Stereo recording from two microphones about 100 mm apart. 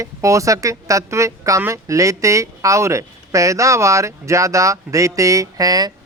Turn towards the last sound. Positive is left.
turn(degrees=-40)  # may be behind; listen again after turning